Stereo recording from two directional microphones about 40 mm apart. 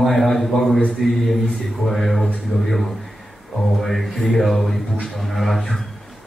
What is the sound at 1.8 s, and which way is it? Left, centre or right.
Speech, centre.